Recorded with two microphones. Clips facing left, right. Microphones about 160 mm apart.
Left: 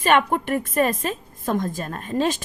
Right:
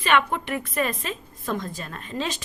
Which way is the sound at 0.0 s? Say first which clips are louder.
Left 4 dB; 45° left (ahead or behind).